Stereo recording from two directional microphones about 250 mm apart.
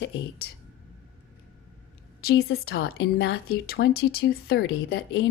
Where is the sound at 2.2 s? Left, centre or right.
Left.